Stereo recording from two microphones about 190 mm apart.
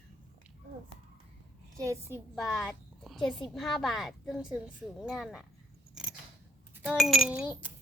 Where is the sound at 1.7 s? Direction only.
15° right (ahead or behind).